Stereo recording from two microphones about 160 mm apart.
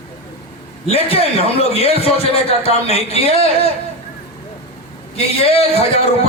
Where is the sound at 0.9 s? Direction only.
40° left (ahead or behind).